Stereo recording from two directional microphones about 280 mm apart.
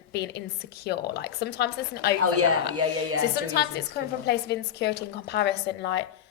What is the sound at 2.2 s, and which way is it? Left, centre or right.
Speech, right.